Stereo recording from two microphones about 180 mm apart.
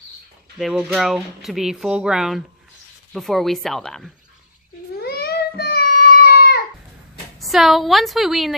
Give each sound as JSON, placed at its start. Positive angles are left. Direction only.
{"t": 0.6, "sound": "speech", "side_deg": 0}
{"t": 4.9, "sound": "child singing", "side_deg": 60}
{"t": 7.3, "sound": "speech", "side_deg": 0}